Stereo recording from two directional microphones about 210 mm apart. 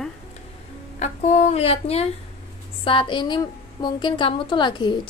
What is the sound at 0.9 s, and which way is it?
A woman's voice, 35° left (ahead or behind).